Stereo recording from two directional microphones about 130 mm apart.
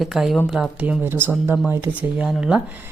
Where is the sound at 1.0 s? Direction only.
15° right (ahead or behind).